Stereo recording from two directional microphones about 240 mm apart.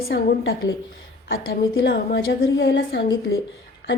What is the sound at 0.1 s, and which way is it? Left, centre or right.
Speech, left.